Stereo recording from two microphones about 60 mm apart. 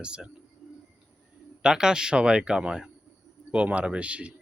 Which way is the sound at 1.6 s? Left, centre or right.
Centre.